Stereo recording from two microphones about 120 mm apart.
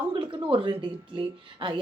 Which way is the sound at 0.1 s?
45° right (ahead or behind).